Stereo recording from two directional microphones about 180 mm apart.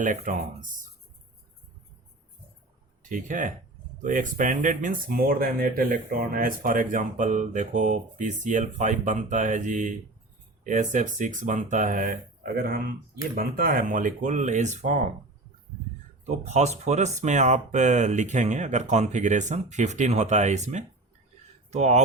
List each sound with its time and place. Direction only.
0.0 s speech: 45° right (ahead or behind)
3.0 s speech: 45° right (ahead or behind)
16.2 s speech: 40° right (ahead or behind)